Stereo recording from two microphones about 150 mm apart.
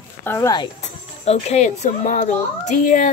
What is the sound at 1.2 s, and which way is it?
A child's voice, 45° left (ahead or behind).